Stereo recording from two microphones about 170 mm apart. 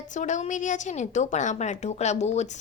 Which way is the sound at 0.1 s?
45° left (ahead or behind).